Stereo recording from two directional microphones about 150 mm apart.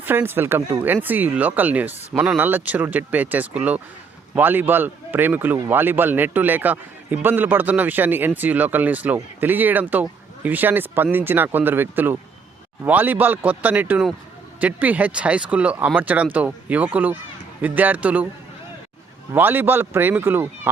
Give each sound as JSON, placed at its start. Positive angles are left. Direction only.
{"t": 0.0, "sound": "a man's voice", "side_deg": -15}
{"t": 19.3, "sound": "a man's voice", "side_deg": -15}